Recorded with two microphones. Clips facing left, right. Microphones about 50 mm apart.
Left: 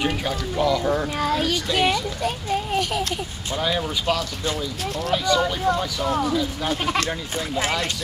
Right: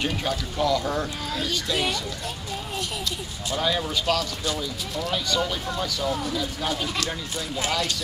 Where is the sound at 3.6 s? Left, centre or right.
Centre.